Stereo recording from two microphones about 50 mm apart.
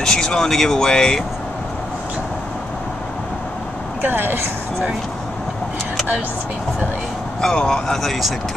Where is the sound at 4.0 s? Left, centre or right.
Right.